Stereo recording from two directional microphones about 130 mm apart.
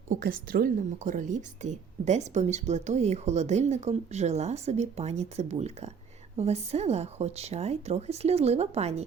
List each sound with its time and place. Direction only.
0.1 s a woman's voice: 90° right; by 9.0 s 55° right (ahead or behind)